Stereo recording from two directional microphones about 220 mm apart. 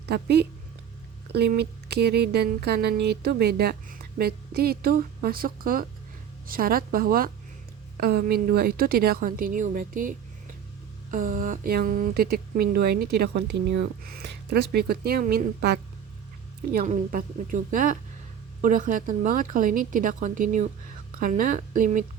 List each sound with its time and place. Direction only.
0.0 s a woman's voice: 50° right (ahead or behind)